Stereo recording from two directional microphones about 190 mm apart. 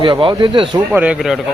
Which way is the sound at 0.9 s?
5° right (ahead or behind).